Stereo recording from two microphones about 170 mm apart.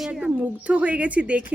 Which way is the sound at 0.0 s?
5° right (ahead or behind).